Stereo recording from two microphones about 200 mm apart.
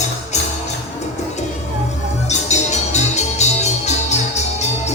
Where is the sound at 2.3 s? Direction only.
35° left (ahead or behind).